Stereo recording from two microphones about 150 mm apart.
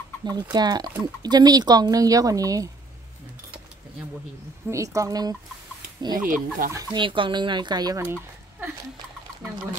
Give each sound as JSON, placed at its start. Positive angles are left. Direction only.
{"t": 0.2, "sound": "speech", "side_deg": -30}
{"t": 4.6, "sound": "speech", "side_deg": -20}
{"t": 6.2, "sound": "speech", "side_deg": -60}
{"t": 6.7, "sound": "speech", "side_deg": -25}
{"t": 8.0, "sound": "a sound", "side_deg": -15}